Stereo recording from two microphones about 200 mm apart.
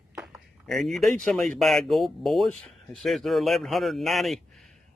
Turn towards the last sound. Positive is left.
turn(degrees=0)  # may be behind; listen again after turning